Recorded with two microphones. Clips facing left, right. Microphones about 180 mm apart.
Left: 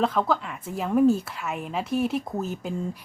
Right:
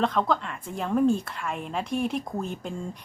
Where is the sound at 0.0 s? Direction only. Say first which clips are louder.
Left 1 dB; 5° left (ahead or behind).